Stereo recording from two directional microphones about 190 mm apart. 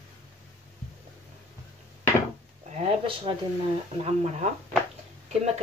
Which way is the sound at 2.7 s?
30° right (ahead or behind).